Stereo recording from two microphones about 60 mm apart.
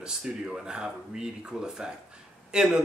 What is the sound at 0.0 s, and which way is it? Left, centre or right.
Speech, centre.